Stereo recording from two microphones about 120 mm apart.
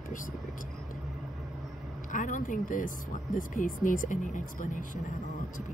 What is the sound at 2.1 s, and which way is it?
Speech, 90° left.